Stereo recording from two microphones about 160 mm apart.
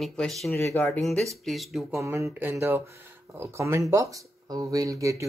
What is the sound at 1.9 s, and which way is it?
Speech, 20° right (ahead or behind).